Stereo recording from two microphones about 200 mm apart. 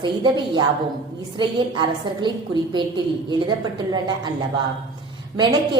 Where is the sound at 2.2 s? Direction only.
25° right (ahead or behind).